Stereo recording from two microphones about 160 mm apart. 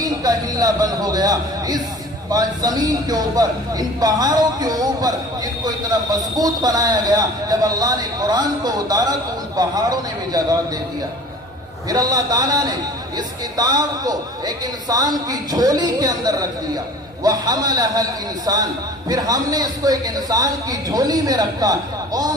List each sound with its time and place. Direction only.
0.0 s a man's voice: 25° right (ahead or behind)
11.9 s a man's voice: 25° right (ahead or behind)